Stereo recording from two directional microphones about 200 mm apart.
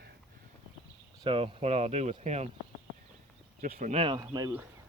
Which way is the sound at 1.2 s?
25° right (ahead or behind).